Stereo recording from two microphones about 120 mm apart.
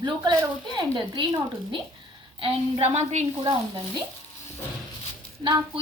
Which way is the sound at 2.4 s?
60° right (ahead or behind).